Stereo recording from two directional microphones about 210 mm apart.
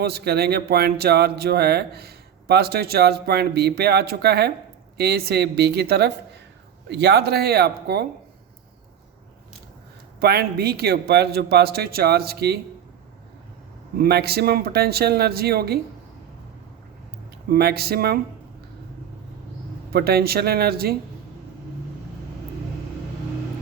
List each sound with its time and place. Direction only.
0.0 s speech: 50° right (ahead or behind)
10.2 s speech: 50° right (ahead or behind)
14.0 s speech: 50° right (ahead or behind)
17.5 s speech: 50° right (ahead or behind)
19.9 s speech: 50° right (ahead or behind)